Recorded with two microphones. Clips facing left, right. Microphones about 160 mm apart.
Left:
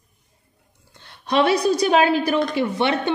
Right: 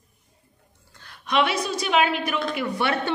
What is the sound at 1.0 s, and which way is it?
A woman's voice, 30° left (ahead or behind).